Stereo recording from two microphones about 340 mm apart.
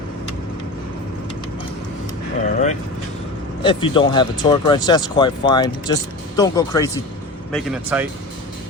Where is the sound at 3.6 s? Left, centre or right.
Centre.